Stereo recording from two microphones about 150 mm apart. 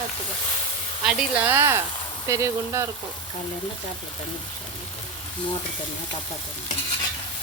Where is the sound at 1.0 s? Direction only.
5° right (ahead or behind).